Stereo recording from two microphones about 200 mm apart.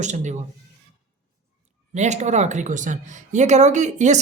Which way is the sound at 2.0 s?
35° right (ahead or behind).